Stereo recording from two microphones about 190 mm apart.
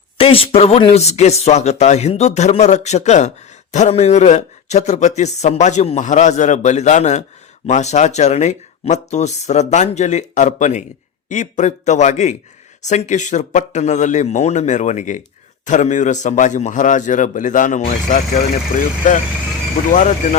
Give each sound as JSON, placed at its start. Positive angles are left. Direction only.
{"t": 0.2, "sound": "a man's voice", "side_deg": 30}